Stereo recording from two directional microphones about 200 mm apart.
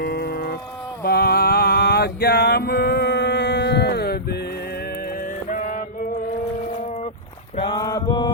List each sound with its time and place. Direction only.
0.0 s a sound: 50° left (ahead or behind)
1.0 s mantra: 50° left (ahead or behind)
5.5 s mantra: 40° left (ahead or behind)
7.5 s mantra: 25° left (ahead or behind)